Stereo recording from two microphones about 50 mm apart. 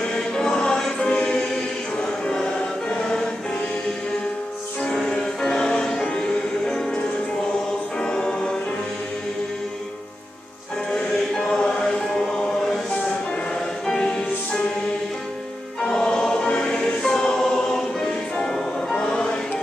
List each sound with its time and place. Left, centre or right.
0.0 s music: centre
2.0 s choir: centre
4.8 s music: centre
8.0 s choir: centre
10.9 s choir: centre
13.8 s music: centre
15.8 s choir: centre
18.5 s music: centre